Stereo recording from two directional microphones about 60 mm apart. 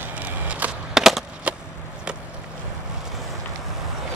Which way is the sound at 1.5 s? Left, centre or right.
Right.